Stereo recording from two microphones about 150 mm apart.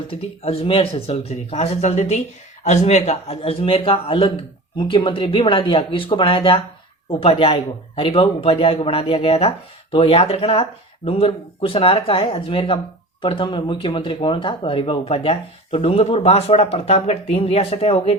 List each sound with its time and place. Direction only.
0.1 s speech: 40° left (ahead or behind)